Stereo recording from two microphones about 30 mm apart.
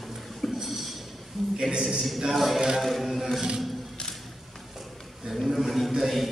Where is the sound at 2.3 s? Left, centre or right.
Centre.